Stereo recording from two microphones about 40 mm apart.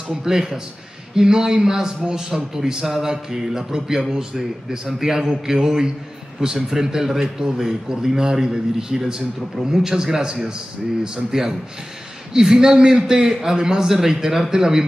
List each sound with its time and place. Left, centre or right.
0.1 s a man's voice: centre